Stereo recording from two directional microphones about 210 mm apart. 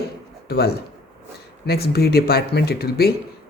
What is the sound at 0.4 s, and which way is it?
Speech, 50° left (ahead or behind).